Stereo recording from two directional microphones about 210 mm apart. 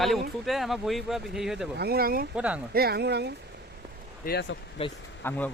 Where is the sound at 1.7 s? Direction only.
50° right (ahead or behind).